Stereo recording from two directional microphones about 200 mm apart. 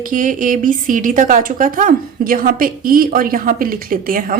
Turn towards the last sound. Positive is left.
turn(degrees=-45)  # may be behind; listen again after turning